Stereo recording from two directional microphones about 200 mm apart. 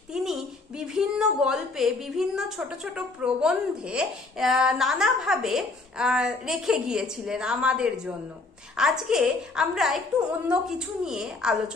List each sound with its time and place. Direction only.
0.1 s a woman's voice: 5° right (ahead or behind)